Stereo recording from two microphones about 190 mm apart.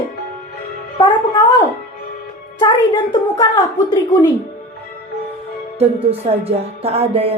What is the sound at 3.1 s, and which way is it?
Speech, 20° left (ahead or behind).